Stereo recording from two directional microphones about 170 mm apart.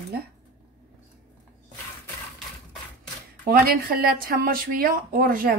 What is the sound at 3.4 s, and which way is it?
Speech, 55° right (ahead or behind).